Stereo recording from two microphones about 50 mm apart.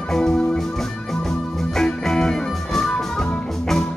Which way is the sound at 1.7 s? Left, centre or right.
Centre.